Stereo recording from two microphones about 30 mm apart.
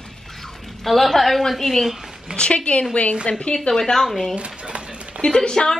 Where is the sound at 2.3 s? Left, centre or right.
Left.